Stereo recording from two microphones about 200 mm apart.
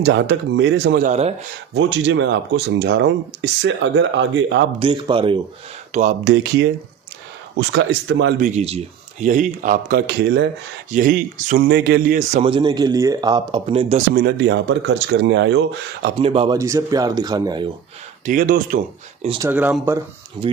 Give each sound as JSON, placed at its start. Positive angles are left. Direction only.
{"t": 0.0, "sound": "speech", "side_deg": -65}
{"t": 1.0, "sound": "speech", "side_deg": -35}
{"t": 1.7, "sound": "speech", "side_deg": -65}
{"t": 4.8, "sound": "speech", "side_deg": -25}
{"t": 5.9, "sound": "speech", "side_deg": -35}
{"t": 6.2, "sound": "speech", "side_deg": -60}
{"t": 8.4, "sound": "speech", "side_deg": -35}
{"t": 10.1, "sound": "speech", "side_deg": -55}
{"t": 10.9, "sound": "speech", "side_deg": -40}
{"t": 13.9, "sound": "speech", "side_deg": -50}
{"t": 16.1, "sound": "speech", "side_deg": -25}
{"t": 16.6, "sound": "speech", "side_deg": -15}
{"t": 18.3, "sound": "speech", "side_deg": -45}
{"t": 19.4, "sound": "speech", "side_deg": -10}